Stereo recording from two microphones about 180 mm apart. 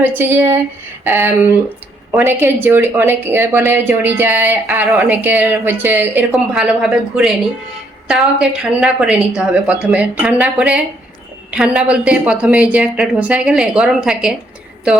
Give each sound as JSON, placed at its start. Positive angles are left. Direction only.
{"t": 0.0, "sound": "a woman's voice", "side_deg": -10}